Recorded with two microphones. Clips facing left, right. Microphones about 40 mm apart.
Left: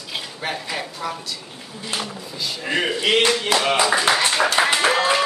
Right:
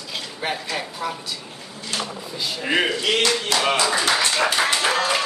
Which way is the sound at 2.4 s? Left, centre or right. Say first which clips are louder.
Right 2 dB; centre.